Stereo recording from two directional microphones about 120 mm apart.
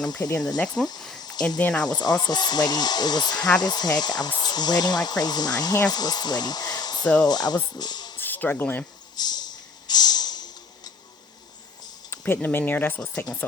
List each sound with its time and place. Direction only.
0.0 s speech: 35° left (ahead or behind)
0.8 s speech: 5° left (ahead or behind)
1.2 s cricket: 35° left (ahead or behind)
1.5 s speech: 5° left (ahead or behind)
1.8 s speech: 35° left (ahead or behind)
8.2 s speech: 15° left (ahead or behind)
9.1 s a sound: 35° left (ahead or behind)
12.1 s speech: 15° left (ahead or behind)